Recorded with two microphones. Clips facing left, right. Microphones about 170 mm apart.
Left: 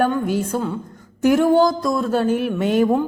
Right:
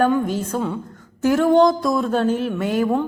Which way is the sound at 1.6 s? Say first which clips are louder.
Right 1 dB; centre (ahead or behind).